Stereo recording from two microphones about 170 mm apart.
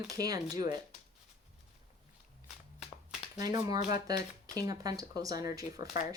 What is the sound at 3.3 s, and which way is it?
Speech, 20° right (ahead or behind).